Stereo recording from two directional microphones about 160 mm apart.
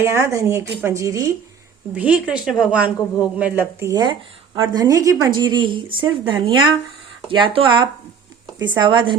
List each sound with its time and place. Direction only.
0.0 s speech: 15° right (ahead or behind)
2.0 s speech: 5° right (ahead or behind)
4.0 s speech: 30° right (ahead or behind)